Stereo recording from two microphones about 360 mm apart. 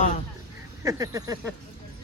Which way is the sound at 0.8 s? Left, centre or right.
Centre.